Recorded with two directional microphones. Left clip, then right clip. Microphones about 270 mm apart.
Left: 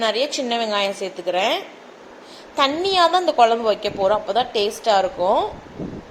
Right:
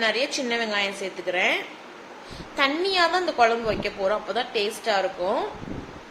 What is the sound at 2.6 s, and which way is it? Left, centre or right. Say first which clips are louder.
A woman's voice: left 5 dB; centre.